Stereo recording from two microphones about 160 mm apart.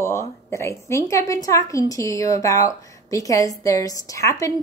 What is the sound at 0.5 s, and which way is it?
A woman's voice, 15° left (ahead or behind).